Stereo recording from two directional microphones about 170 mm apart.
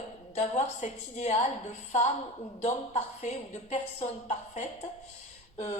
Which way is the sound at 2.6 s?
40° left (ahead or behind).